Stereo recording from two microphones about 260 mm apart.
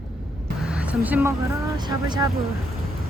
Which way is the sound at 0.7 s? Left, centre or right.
Centre.